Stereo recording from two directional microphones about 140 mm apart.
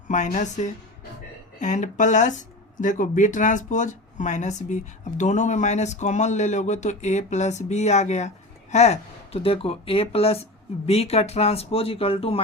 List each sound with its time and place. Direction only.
0.1 s speech: 65° left (ahead or behind); by 12.4 s 40° left (ahead or behind)